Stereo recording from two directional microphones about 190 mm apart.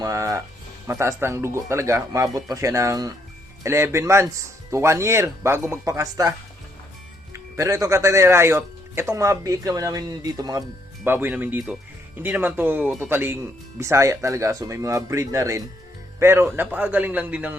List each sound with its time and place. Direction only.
0.0 s a man's voice: 15° right (ahead or behind)
7.5 s a man's voice: 15° right (ahead or behind)